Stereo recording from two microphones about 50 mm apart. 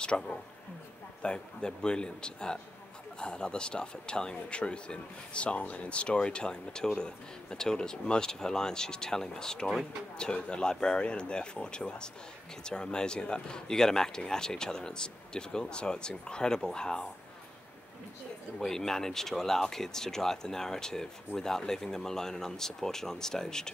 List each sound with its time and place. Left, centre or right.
0.0 s speech: centre
18.6 s speech: centre